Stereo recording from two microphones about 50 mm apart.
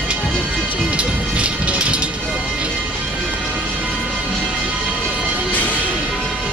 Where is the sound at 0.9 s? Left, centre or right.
Right.